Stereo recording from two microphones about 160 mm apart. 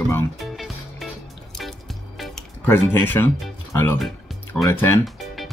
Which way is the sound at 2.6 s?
15° left (ahead or behind).